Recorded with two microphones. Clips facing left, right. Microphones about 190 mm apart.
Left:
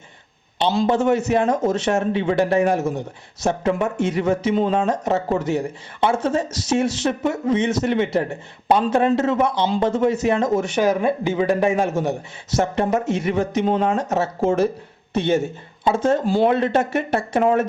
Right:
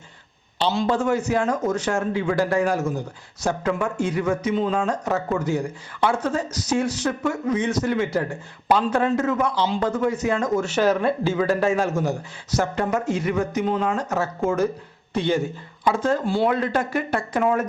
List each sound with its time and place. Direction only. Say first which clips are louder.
0.9 s speech: left 4 dB; 25° left (ahead or behind)
16.2 s speech: left 4 dB; 40° left (ahead or behind)
16.5 s speech: left 4 dB; 25° left (ahead or behind)